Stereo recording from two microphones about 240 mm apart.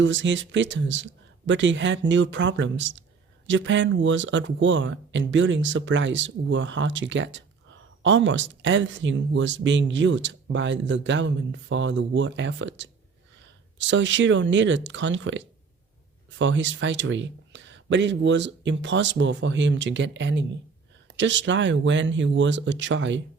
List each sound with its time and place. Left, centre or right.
0.0 s speech: right